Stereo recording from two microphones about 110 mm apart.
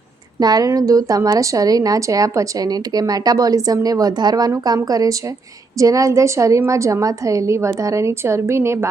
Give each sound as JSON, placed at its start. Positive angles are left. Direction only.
{"t": 0.3, "sound": "a woman's voice", "side_deg": -35}